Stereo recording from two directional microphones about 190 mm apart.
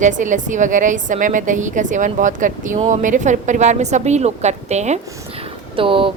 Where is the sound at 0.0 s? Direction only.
40° right (ahead or behind).